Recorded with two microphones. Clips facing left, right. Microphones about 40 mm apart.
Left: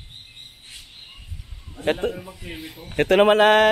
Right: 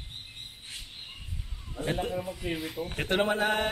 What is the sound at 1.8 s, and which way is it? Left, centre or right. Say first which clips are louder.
Speech: left 7 dB; left.